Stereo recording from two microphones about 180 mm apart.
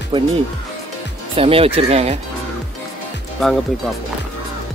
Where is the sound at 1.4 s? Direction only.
30° right (ahead or behind).